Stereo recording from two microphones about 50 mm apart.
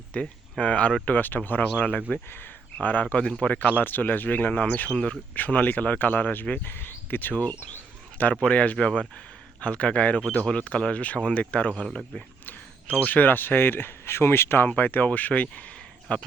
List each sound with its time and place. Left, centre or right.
0.1 s speech: left
1.0 s speech: left
2.0 s speech: centre
2.8 s speech: left
6.7 s speech: left
13.0 s speech: left
14.7 s speech: left